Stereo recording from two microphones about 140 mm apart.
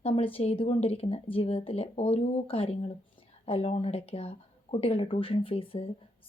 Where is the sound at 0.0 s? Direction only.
45° left (ahead or behind).